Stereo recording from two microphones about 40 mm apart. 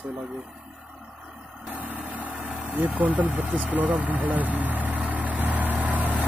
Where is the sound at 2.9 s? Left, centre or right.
Right.